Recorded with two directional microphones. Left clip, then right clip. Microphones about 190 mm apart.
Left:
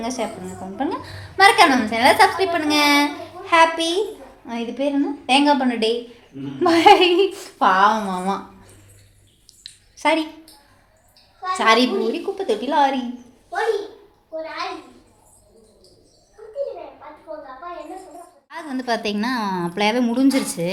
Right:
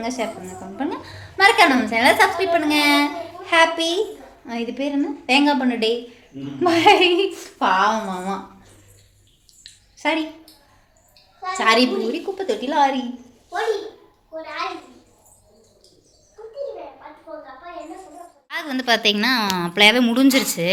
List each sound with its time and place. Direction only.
0.0 s a woman's voice: 10° left (ahead or behind)
9.5 s a sound: 25° left (ahead or behind)
11.5 s a woman's voice: 5° left (ahead or behind)
18.4 s a woman's voice: centre (ahead or behind)